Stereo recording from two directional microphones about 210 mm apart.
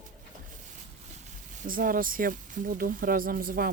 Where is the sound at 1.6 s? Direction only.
40° right (ahead or behind).